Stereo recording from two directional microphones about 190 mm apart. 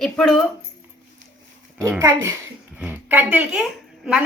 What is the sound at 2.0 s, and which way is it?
A child's voice, 15° right (ahead or behind).